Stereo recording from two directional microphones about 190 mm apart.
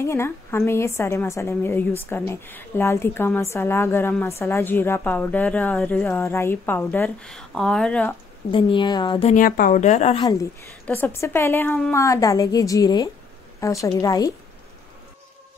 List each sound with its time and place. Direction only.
0.0 s a woman's voice: 15° left (ahead or behind)
8.5 s a woman's voice: 25° left (ahead or behind)
9.3 s speech: 45° left (ahead or behind)
10.1 s a woman's voice: 20° left (ahead or behind)